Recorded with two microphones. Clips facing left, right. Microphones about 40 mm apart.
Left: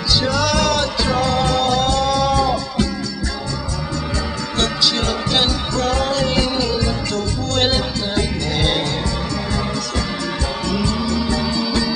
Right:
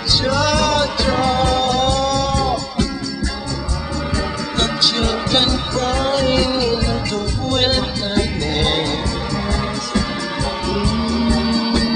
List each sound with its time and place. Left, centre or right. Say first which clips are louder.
0.2 s music: right 3 dB; centre
4.6 s music: even; centre
10.7 s music: right 1 dB; centre